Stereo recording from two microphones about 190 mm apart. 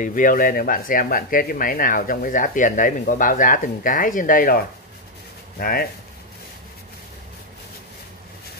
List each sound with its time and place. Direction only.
0.0 s speech: 45° left (ahead or behind)